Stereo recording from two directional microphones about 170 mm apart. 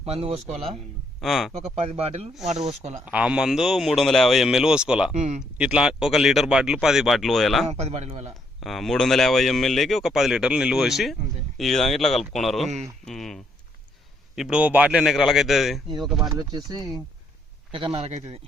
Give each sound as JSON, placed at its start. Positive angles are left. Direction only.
{"t": 0.0, "sound": "a man's voice", "side_deg": -35}
{"t": 1.2, "sound": "speech", "side_deg": 0}
{"t": 1.7, "sound": "a man's voice", "side_deg": -35}
{"t": 3.1, "sound": "speech", "side_deg": -5}
{"t": 5.1, "sound": "speech", "side_deg": -45}
{"t": 5.5, "sound": "speech", "side_deg": -5}
{"t": 7.7, "sound": "a man's voice", "side_deg": -40}
{"t": 8.6, "sound": "speech", "side_deg": 0}
{"t": 16.3, "sound": "a man's voice", "side_deg": -25}